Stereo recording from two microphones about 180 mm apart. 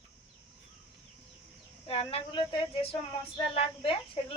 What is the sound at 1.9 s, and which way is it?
Speech, 30° left (ahead or behind).